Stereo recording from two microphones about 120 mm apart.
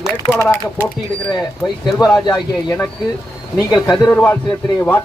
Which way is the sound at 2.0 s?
30° left (ahead or behind).